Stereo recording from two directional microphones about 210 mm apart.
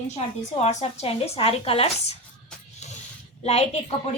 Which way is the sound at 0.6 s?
30° left (ahead or behind).